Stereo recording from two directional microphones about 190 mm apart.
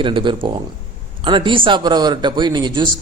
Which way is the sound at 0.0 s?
25° right (ahead or behind).